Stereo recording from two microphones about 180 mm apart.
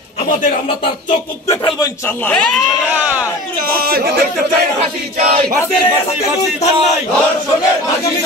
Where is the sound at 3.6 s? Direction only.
55° right (ahead or behind).